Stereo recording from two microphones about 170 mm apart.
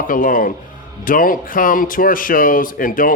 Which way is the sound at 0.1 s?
55° left (ahead or behind).